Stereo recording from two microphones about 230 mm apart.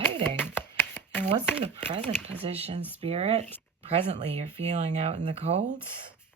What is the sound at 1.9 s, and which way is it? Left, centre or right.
Speech, right.